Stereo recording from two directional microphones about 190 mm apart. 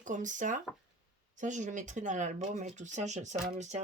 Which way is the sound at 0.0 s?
40° right (ahead or behind).